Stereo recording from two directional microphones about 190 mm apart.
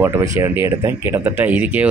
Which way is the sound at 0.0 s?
15° right (ahead or behind).